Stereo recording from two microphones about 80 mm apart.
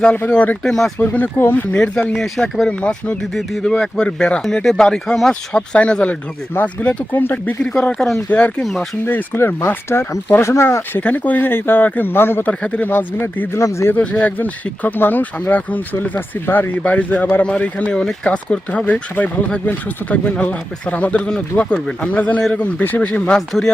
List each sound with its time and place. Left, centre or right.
0.3 s speech: centre
0.6 s speech: centre
0.9 s speech: left
2.1 s speech: centre
2.6 s speech: centre
6.5 s speech: left
7.6 s speech: centre
8.3 s speech: centre
9.4 s speech: left
11.0 s speech: centre
12.5 s speech: centre; by 13.9 s left
13.9 s speech: centre